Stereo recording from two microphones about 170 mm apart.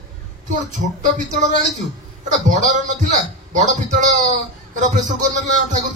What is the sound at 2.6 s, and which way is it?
A man's voice, 45° right (ahead or behind).